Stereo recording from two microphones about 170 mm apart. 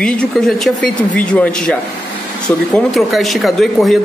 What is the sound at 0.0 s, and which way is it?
A man's voice, 5° left (ahead or behind).